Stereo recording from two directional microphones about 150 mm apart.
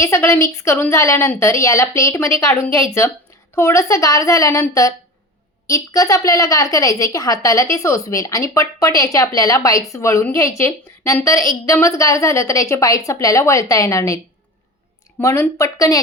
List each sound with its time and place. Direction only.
0.0 s a woman's voice: 15° left (ahead or behind)
15.2 s a woman's voice: 20° left (ahead or behind)